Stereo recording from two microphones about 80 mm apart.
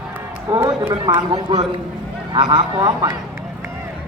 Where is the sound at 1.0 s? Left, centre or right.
Right.